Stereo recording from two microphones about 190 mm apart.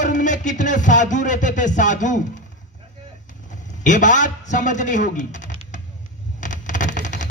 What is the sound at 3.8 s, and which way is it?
A man's voice, 40° left (ahead or behind).